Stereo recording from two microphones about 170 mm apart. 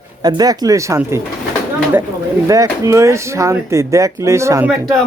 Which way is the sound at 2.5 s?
20° right (ahead or behind).